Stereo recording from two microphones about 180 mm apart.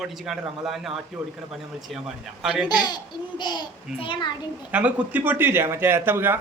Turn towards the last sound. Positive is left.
turn(degrees=-10)  # may be behind; listen again after turning